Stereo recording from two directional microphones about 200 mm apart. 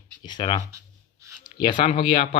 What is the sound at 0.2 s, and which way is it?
Speech, 20° left (ahead or behind).